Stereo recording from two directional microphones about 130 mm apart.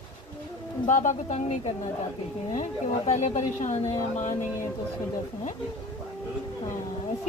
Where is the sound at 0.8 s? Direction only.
65° left (ahead or behind).